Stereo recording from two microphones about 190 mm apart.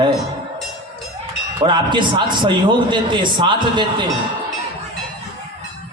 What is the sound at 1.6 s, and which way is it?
A man's voice, 25° right (ahead or behind).